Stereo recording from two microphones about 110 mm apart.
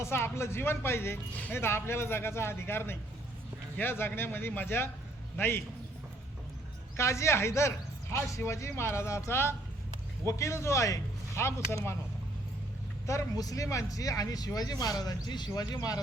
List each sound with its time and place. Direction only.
0.0 s speech: 25° left (ahead or behind)
6.9 s speech: 25° left (ahead or behind)
13.1 s speech: 30° left (ahead or behind)